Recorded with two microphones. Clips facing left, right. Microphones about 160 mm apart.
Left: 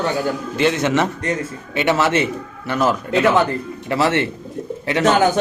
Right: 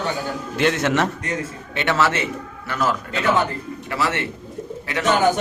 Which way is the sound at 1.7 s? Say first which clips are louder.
Left 3 dB; 15° left (ahead or behind).